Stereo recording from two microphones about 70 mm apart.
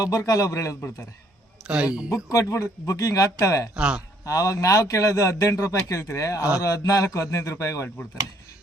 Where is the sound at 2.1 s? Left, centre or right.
Left.